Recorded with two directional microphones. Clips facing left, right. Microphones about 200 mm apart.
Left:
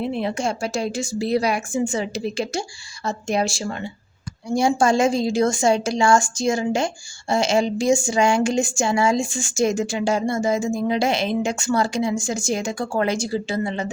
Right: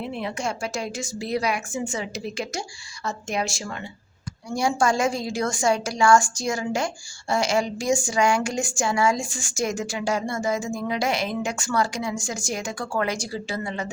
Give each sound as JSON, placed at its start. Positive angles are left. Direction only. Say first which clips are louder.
{"t": 0.0, "sound": "a woman's voice", "louder": "left 5 dB", "side_deg": 30}